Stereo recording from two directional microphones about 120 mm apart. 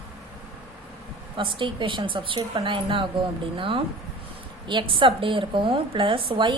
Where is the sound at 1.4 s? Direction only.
45° right (ahead or behind).